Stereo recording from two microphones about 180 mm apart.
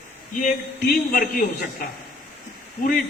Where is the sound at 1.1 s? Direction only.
55° left (ahead or behind).